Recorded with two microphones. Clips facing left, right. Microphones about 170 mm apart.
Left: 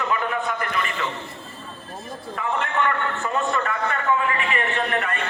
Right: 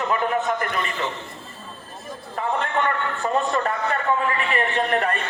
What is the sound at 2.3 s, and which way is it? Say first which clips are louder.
A man's voice: right 1 dB; 35° right (ahead or behind).